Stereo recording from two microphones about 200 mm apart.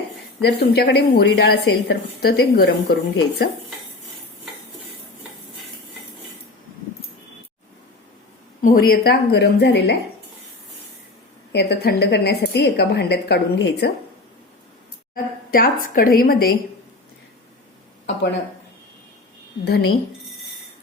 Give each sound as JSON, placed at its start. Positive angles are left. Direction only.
{"t": 0.4, "sound": "a woman's voice", "side_deg": 55}
{"t": 8.6, "sound": "a woman's voice", "side_deg": 45}
{"t": 11.5, "sound": "a woman's voice", "side_deg": 55}
{"t": 15.1, "sound": "a woman's voice", "side_deg": 45}
{"t": 19.6, "sound": "a woman's voice", "side_deg": 55}